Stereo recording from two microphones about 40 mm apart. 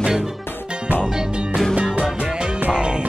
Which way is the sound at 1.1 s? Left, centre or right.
Right.